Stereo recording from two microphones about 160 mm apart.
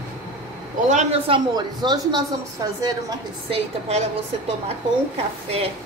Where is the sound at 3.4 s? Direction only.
40° right (ahead or behind).